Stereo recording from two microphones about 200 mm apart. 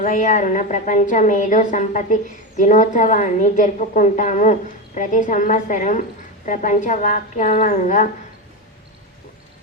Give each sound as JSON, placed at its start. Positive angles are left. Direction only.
{"t": 0.0, "sound": "a woman's voice", "side_deg": 40}